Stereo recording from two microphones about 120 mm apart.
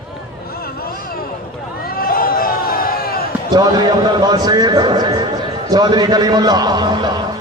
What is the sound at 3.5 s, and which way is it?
A man's voice, 35° right (ahead or behind).